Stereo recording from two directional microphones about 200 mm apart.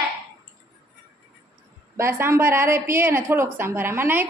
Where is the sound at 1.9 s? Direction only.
15° right (ahead or behind).